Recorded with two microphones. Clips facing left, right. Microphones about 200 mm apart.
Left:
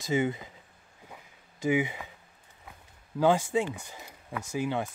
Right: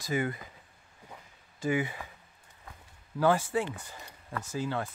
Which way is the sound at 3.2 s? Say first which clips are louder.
Left 2 dB; 20° left (ahead or behind).